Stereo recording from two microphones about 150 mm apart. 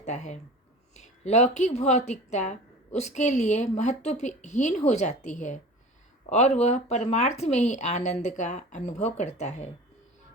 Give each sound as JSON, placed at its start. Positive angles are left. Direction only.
{"t": 0.0, "sound": "speech", "side_deg": 50}